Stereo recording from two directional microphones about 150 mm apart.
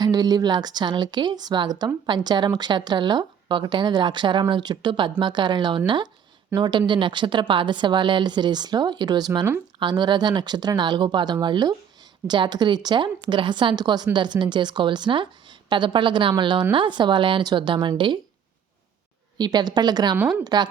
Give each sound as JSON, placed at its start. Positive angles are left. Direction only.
{"t": 0.0, "sound": "speech", "side_deg": -25}
{"t": 19.4, "sound": "speech", "side_deg": -30}
{"t": 20.1, "sound": "a woman's voice", "side_deg": -10}
{"t": 20.4, "sound": "speech", "side_deg": -30}